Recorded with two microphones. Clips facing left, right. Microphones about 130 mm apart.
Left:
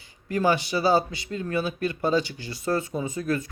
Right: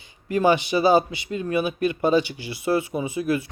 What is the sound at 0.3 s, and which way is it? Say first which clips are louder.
Speech: right 4 dB; 20° right (ahead or behind).